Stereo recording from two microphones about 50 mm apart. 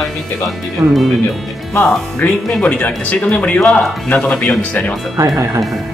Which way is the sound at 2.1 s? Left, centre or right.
Left.